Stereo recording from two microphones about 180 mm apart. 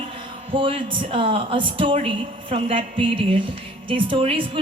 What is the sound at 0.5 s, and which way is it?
Speech, 30° right (ahead or behind).